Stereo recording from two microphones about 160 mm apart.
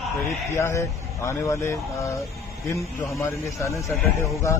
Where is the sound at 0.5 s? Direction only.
15° left (ahead or behind).